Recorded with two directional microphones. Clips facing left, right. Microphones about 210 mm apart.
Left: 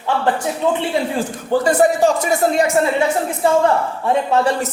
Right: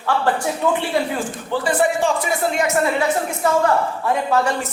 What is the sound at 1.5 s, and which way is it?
A woman's voice, 40° left (ahead or behind).